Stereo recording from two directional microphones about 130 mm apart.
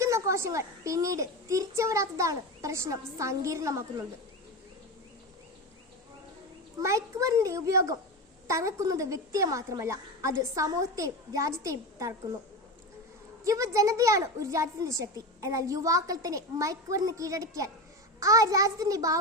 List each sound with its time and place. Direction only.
0.0 s a woman's voice: 25° right (ahead or behind)
6.8 s a woman's voice: 25° right (ahead or behind)
13.4 s a woman's voice: 25° right (ahead or behind)